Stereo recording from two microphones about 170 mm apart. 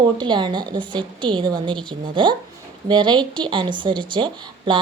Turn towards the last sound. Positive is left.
turn(degrees=-30)  # may be behind; listen again after turning